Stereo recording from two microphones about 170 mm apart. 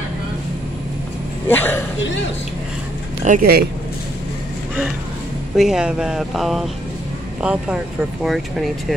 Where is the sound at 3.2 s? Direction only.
55° right (ahead or behind).